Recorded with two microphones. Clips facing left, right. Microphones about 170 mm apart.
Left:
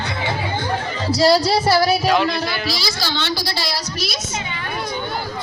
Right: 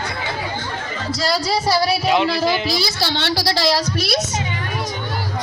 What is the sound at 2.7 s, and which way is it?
A woman's voice, 60° right (ahead or behind).